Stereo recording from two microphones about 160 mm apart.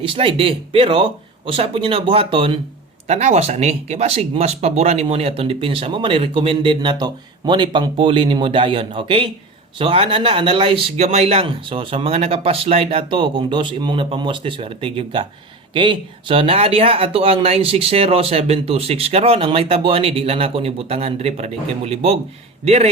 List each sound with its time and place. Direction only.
0.0 s speech: 35° right (ahead or behind)